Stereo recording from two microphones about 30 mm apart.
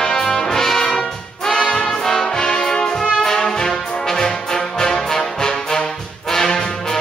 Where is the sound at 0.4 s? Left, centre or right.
Centre.